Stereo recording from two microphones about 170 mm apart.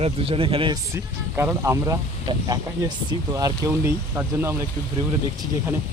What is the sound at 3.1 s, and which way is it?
Speech, 20° right (ahead or behind).